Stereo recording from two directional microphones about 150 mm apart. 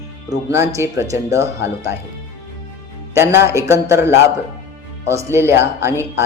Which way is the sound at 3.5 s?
20° right (ahead or behind).